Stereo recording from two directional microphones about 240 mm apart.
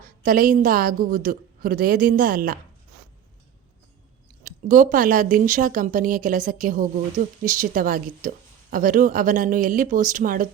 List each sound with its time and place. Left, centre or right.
0.0 s a woman's voice: right
4.4 s a woman's voice: right